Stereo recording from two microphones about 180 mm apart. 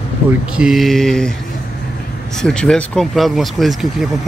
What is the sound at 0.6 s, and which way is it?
Speech, centre (ahead or behind).